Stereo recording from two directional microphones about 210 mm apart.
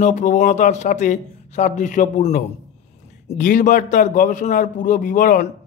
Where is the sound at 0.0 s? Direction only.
35° left (ahead or behind).